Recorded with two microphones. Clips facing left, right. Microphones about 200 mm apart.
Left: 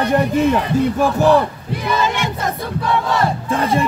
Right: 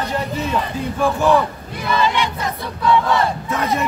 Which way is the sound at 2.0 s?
45° left (ahead or behind).